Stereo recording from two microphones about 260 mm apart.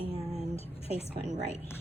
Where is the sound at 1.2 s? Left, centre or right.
Right.